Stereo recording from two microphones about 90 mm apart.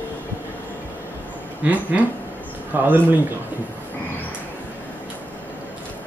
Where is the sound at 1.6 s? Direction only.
15° right (ahead or behind).